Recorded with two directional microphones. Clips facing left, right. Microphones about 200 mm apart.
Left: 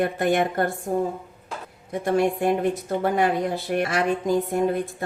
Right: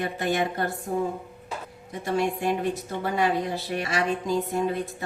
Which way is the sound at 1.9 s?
55° left (ahead or behind).